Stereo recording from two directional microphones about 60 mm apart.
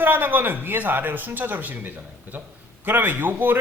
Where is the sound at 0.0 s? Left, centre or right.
Right.